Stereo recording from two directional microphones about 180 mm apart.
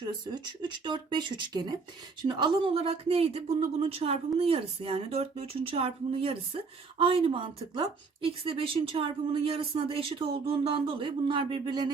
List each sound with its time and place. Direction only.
0.0 s speech: 25° right (ahead or behind)